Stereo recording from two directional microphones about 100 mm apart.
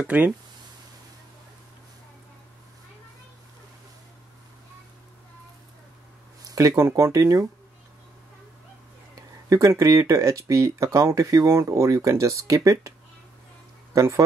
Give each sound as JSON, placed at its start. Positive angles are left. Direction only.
{"t": 0.0, "sound": "speech", "side_deg": -15}
{"t": 6.5, "sound": "speech", "side_deg": -35}
{"t": 9.5, "sound": "speech", "side_deg": -30}
{"t": 13.9, "sound": "speech", "side_deg": -30}